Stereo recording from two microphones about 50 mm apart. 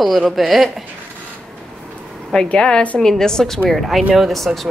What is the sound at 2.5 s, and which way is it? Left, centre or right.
Speech, centre.